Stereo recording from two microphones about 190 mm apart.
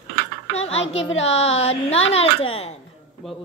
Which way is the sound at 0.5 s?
35° left (ahead or behind).